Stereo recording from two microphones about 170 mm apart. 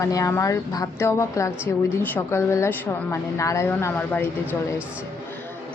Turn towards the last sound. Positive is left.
turn(degrees=10)  # may be behind; listen again after turning